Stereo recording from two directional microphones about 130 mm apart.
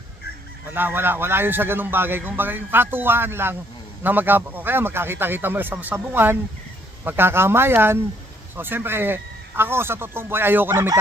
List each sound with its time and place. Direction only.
0.7 s a man's voice: 15° right (ahead or behind)